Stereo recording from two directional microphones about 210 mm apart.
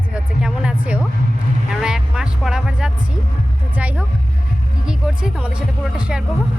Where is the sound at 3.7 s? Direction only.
5° right (ahead or behind).